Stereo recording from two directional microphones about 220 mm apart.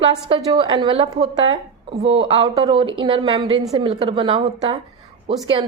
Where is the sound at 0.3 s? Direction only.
25° right (ahead or behind).